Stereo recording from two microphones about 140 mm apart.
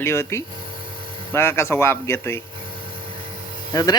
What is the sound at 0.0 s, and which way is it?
A man's voice, 20° left (ahead or behind).